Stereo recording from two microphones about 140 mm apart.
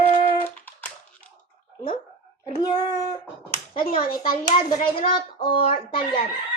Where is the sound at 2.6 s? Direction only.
25° left (ahead or behind).